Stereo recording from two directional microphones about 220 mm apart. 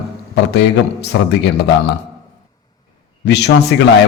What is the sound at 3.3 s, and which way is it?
Speech, 50° left (ahead or behind).